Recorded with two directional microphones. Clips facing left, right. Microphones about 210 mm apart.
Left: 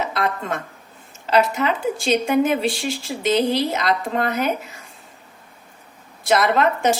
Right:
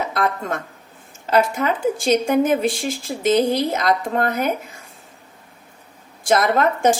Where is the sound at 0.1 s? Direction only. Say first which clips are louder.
Right 1 dB; 50° right (ahead or behind).